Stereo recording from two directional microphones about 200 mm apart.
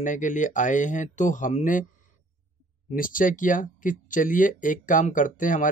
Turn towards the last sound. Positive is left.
turn(degrees=40)  # may be behind; listen again after turning